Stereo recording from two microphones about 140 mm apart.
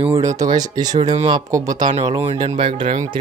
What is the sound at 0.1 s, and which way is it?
Speech, 20° right (ahead or behind).